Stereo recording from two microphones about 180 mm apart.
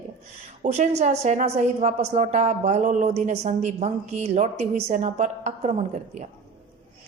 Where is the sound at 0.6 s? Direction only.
40° right (ahead or behind).